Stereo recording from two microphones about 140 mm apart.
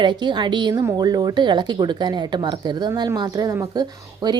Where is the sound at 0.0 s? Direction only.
35° right (ahead or behind).